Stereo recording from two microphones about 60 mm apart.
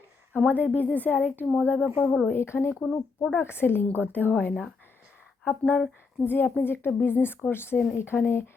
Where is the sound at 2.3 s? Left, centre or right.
Left.